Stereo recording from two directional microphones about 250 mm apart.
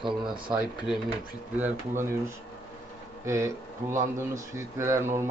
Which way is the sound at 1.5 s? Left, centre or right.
Centre.